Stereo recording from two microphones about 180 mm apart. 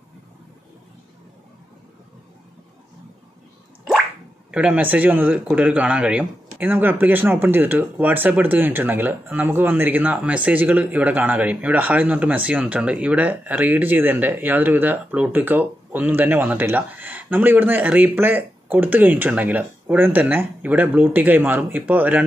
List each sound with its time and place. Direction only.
4.5 s a man's voice: 5° right (ahead or behind)